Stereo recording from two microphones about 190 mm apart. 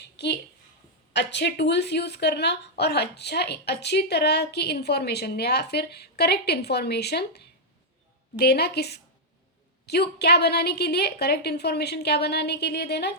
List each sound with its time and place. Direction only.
1.1 s speech: 65° left (ahead or behind)